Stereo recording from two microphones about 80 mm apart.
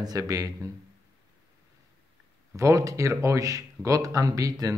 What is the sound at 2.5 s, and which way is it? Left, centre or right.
Speech, right.